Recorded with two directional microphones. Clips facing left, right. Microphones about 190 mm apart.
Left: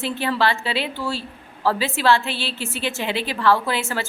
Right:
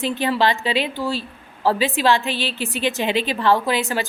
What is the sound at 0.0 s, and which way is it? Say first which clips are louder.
A woman's voice: right 2 dB; 15° right (ahead or behind).